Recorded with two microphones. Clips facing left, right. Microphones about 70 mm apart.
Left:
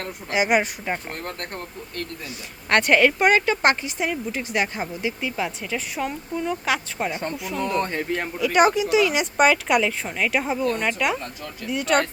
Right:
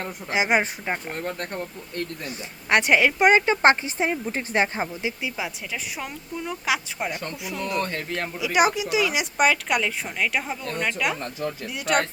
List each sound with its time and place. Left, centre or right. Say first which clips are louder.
0.3 s speech: left 1 dB; right
0.9 s speech: even; centre
2.6 s speech: left 2 dB; centre
5.2 s speech: left 3 dB; centre
7.1 s speech: left 3 dB; left
8.4 s speech: left 3 dB; centre